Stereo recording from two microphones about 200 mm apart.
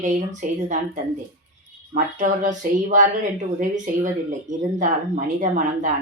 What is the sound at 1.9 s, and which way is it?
Speech, 40° right (ahead or behind).